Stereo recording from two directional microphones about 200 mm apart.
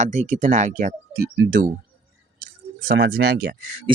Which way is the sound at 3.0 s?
55° right (ahead or behind).